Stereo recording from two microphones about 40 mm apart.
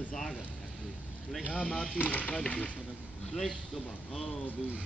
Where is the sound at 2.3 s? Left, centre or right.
Left.